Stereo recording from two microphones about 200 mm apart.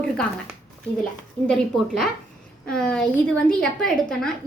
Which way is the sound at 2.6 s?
5° left (ahead or behind).